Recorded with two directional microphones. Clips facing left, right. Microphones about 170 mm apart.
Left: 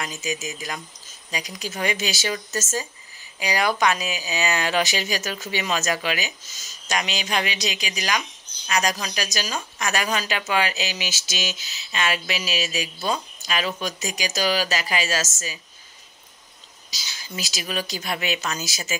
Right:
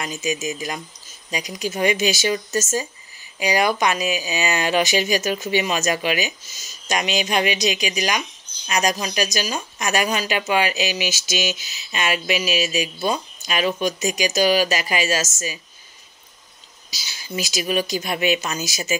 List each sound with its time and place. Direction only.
0.0 s speech: 20° right (ahead or behind)
16.9 s speech: 15° right (ahead or behind)